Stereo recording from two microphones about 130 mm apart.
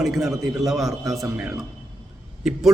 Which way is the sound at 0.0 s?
Centre (ahead or behind).